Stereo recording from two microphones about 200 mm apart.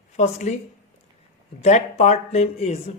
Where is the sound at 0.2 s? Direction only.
35° left (ahead or behind).